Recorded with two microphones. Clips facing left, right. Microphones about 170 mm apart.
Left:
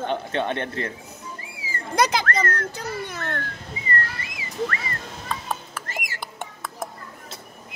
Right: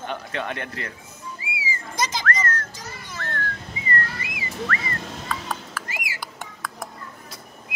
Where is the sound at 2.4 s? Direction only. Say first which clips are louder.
Left 3 dB; 60° left (ahead or behind).